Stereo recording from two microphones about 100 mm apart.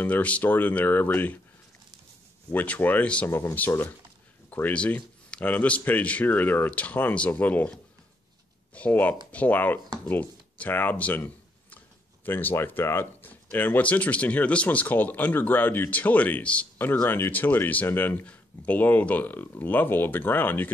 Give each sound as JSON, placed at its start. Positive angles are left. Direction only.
{"t": 0.0, "sound": "speech", "side_deg": 15}
{"t": 2.5, "sound": "speech", "side_deg": 15}
{"t": 3.3, "sound": "speech", "side_deg": 25}
{"t": 8.7, "sound": "speech", "side_deg": 15}